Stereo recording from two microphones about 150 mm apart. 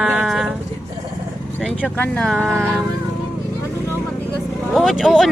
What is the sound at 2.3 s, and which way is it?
Speech, centre (ahead or behind).